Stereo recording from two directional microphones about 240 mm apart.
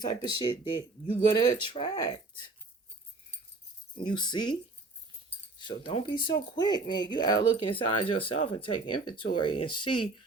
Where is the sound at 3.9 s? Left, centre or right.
Centre.